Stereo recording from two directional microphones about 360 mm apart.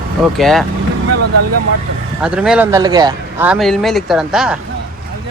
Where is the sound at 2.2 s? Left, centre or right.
Centre.